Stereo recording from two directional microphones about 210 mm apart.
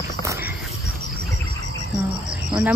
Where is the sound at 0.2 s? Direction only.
15° right (ahead or behind).